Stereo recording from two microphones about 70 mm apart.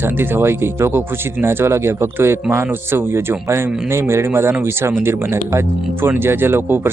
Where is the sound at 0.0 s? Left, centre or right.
Right.